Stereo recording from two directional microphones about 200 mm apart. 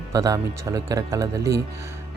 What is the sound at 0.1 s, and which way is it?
Speech, 15° right (ahead or behind).